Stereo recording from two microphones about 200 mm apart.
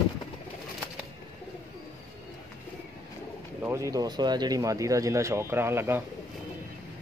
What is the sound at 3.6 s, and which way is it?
Speech, 15° right (ahead or behind).